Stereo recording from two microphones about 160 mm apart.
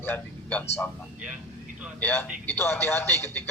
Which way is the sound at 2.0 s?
10° left (ahead or behind).